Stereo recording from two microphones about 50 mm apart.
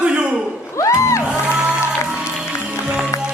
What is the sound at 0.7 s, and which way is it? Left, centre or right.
Music, left.